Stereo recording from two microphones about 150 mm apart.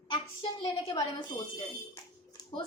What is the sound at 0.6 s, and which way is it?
Speech, 30° left (ahead or behind).